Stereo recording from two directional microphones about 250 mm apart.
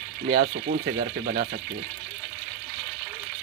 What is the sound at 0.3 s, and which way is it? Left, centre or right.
Speech, right.